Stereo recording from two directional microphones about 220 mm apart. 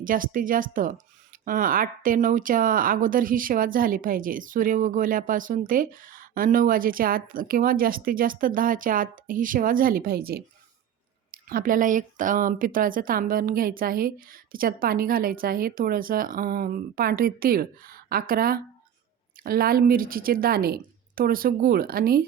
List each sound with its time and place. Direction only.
0.0 s speech: 40° right (ahead or behind)